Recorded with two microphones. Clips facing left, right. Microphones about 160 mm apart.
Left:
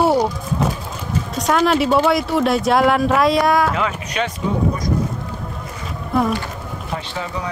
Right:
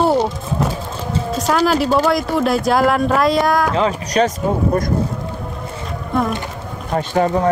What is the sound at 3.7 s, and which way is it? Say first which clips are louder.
Speech: right 5 dB; 35° right (ahead or behind).